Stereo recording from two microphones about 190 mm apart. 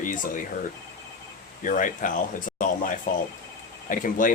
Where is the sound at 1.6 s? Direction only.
45° left (ahead or behind).